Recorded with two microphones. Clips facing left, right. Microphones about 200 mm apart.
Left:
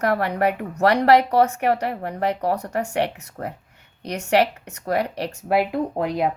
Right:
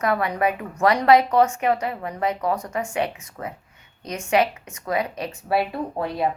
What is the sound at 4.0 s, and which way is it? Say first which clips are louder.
Speech: left 2 dB; 70° left (ahead or behind).